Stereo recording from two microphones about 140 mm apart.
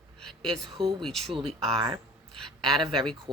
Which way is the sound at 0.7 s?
40° right (ahead or behind).